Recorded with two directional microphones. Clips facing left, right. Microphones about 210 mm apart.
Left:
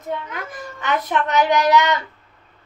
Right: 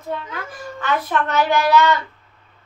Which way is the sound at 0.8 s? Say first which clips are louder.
Even; 20° left (ahead or behind).